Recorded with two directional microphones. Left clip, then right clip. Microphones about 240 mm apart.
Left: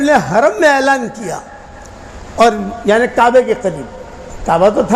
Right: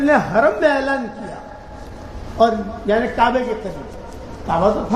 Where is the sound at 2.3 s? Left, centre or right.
Left.